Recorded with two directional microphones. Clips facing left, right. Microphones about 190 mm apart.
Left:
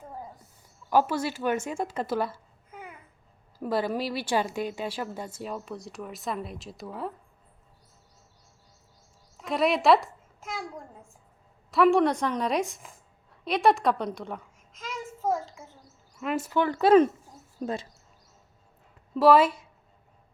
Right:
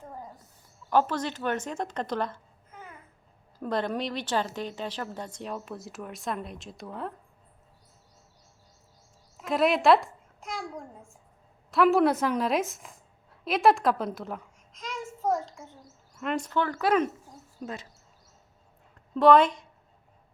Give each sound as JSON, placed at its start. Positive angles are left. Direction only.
{"t": 0.9, "sound": "speech", "side_deg": 10}
{"t": 9.4, "sound": "a child's voice", "side_deg": 0}
{"t": 17.6, "sound": "speech", "side_deg": 45}
{"t": 19.1, "sound": "speech", "side_deg": 5}